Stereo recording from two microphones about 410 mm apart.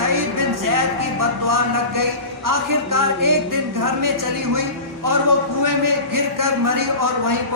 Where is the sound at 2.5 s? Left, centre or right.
Right.